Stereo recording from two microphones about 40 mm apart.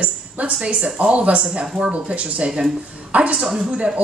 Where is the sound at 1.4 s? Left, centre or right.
Right.